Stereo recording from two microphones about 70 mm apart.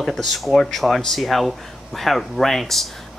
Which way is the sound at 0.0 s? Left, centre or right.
Centre.